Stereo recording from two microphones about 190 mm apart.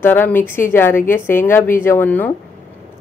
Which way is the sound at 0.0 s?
10° left (ahead or behind).